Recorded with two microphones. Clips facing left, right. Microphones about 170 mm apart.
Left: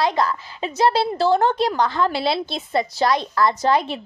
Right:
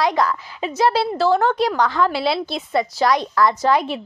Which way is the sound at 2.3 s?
10° right (ahead or behind).